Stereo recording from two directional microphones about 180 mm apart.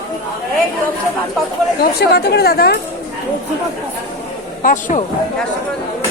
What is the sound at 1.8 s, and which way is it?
Speech, 60° left (ahead or behind).